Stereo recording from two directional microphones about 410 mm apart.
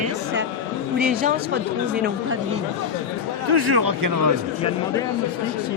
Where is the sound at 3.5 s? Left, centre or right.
Right.